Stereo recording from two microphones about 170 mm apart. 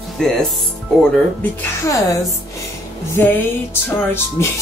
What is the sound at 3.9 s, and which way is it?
Speech, 15° left (ahead or behind).